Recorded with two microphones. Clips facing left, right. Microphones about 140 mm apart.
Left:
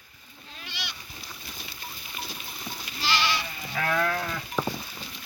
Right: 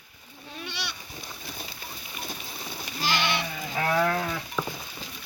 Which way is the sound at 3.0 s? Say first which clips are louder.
Even; 50° right (ahead or behind).